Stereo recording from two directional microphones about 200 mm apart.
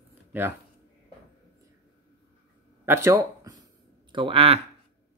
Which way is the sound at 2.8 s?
10° right (ahead or behind).